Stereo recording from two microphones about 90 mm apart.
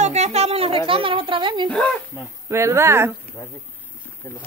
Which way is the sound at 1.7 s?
10° left (ahead or behind).